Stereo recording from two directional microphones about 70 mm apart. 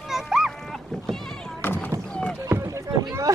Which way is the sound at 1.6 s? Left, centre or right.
Left.